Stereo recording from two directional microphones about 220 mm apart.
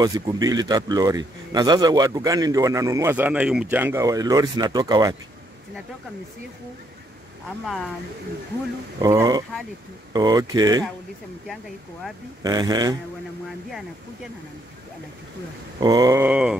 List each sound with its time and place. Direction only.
0.0 s a man's voice: 15° right (ahead or behind)
9.0 s a man's voice: 15° right (ahead or behind)
12.4 s a man's voice: 15° right (ahead or behind)
15.8 s a man's voice: 15° right (ahead or behind)